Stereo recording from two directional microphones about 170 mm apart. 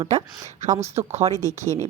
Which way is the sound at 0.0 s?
45° right (ahead or behind).